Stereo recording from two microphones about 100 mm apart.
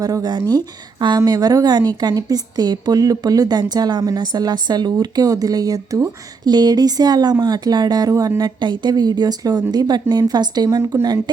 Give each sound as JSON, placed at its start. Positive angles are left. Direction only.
{"t": 0.0, "sound": "a woman's voice", "side_deg": -40}